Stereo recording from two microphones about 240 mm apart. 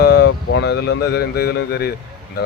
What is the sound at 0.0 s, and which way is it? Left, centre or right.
A man's voice, left.